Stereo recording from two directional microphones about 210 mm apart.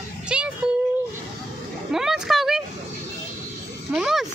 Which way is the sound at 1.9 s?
Centre (ahead or behind).